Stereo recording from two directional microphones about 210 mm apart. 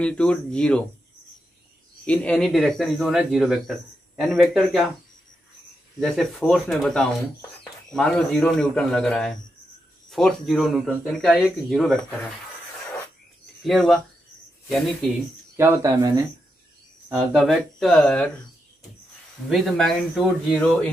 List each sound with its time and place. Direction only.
0.0 s speech: 5° left (ahead or behind)
2.0 s speech: 5° left (ahead or behind)
5.9 s speech: centre (ahead or behind)
13.6 s speech: centre (ahead or behind)
15.5 s speech: 15° right (ahead or behind)
17.1 s speech: centre (ahead or behind)
19.5 s speech: centre (ahead or behind)